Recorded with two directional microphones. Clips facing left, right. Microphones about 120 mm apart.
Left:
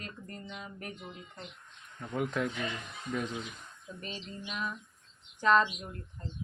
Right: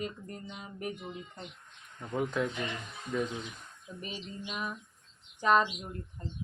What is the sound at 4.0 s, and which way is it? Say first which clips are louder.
Speech: right 2 dB; 10° right (ahead or behind).